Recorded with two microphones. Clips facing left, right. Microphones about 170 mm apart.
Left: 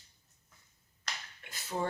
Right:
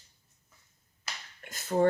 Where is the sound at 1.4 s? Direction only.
45° right (ahead or behind).